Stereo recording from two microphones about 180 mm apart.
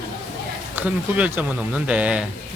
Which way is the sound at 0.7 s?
10° right (ahead or behind).